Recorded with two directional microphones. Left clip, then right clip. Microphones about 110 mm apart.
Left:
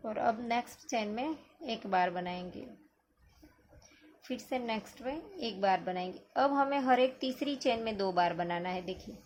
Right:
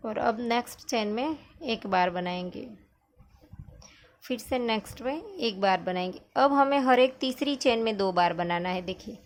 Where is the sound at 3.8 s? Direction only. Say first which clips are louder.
Right 6 dB; 55° right (ahead or behind).